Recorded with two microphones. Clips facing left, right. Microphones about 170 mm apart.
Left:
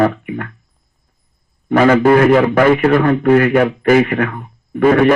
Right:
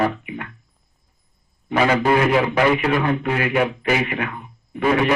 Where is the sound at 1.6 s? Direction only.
50° left (ahead or behind).